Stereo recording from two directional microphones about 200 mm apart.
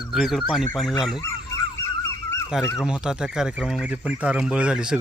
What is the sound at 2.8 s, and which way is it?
Speech, 5° right (ahead or behind).